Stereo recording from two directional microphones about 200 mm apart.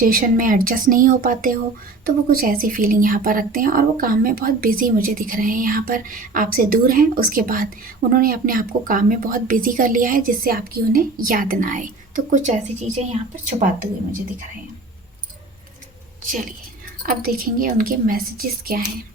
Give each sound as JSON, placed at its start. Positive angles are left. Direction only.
{"t": 0.0, "sound": "a woman's voice", "side_deg": -45}
{"t": 16.2, "sound": "a woman's voice", "side_deg": -40}